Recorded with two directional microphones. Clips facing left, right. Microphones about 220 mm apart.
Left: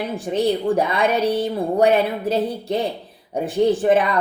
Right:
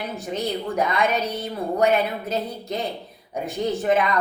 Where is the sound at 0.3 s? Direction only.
30° left (ahead or behind).